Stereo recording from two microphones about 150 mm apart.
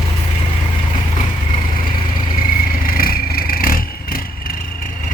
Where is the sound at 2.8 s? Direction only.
75° left (ahead or behind).